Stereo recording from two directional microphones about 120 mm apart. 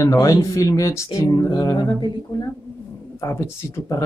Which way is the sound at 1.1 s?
30° left (ahead or behind).